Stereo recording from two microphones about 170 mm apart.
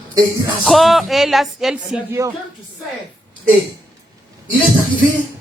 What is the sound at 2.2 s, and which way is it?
Speech, 15° right (ahead or behind).